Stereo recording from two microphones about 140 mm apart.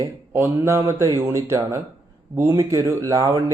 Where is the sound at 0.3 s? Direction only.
20° right (ahead or behind).